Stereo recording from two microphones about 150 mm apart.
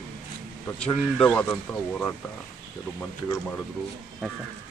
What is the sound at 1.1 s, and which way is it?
Speech, 10° left (ahead or behind).